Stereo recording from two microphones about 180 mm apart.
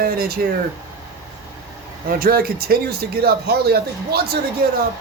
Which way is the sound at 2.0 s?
55° right (ahead or behind).